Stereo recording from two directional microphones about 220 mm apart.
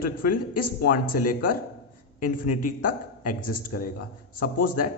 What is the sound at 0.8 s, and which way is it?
A man's voice, 40° left (ahead or behind).